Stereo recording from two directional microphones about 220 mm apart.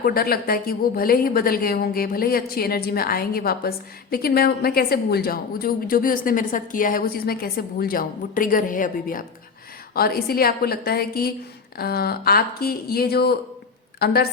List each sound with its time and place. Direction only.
0.0 s a woman's voice: 45° left (ahead or behind)